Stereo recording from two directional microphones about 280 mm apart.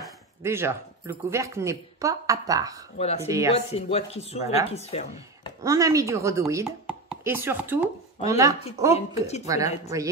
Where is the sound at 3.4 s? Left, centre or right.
Left.